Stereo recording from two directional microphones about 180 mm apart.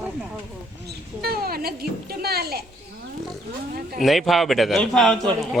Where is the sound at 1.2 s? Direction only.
55° right (ahead or behind).